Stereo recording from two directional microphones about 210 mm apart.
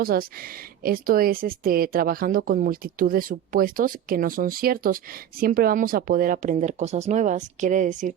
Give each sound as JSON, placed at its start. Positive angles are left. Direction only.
{"t": 0.0, "sound": "speech", "side_deg": -45}